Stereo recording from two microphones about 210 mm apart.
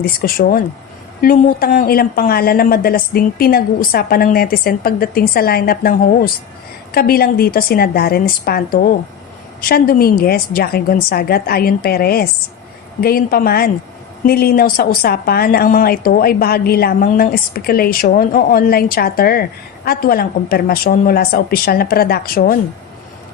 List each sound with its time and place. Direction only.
0.0 s a woman's voice: 45° left (ahead or behind)